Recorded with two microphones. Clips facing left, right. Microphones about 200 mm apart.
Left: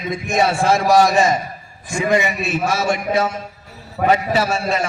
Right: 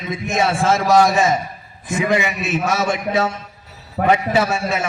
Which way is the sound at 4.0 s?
50° right (ahead or behind).